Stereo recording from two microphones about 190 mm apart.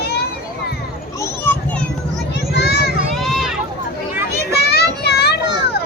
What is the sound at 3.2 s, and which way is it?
Run, centre (ahead or behind).